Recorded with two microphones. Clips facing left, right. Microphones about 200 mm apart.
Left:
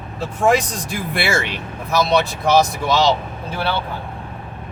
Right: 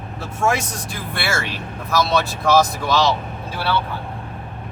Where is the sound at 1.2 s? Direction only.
15° left (ahead or behind).